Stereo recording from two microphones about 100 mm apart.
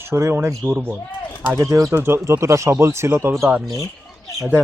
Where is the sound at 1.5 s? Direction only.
35° right (ahead or behind).